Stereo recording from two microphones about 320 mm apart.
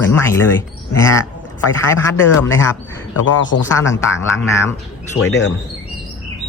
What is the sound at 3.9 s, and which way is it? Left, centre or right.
Speech, left.